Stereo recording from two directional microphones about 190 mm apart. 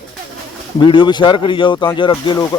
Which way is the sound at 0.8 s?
25° left (ahead or behind).